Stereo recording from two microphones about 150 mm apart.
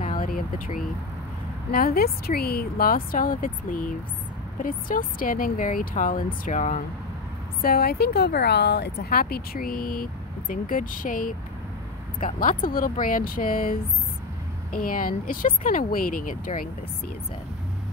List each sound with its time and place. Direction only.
0.2 s vehicle: 65° left (ahead or behind)
1.7 s a woman's voice: 75° left (ahead or behind); by 6.8 s 50° left (ahead or behind)
7.6 s speech: 90° left; by 10.0 s 75° left (ahead or behind)
10.5 s speech: 65° left (ahead or behind)
12.4 s a woman's voice: 70° left (ahead or behind)